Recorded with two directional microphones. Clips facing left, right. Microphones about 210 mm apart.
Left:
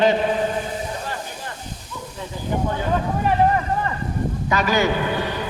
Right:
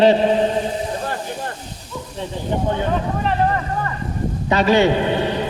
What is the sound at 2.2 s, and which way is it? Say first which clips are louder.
Speech: right 6 dB; 30° right (ahead or behind).